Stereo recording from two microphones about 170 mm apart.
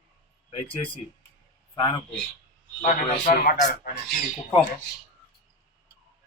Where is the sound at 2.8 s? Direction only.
50° left (ahead or behind).